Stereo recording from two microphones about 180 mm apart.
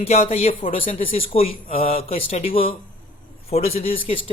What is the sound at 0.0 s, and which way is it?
Speech, 35° left (ahead or behind).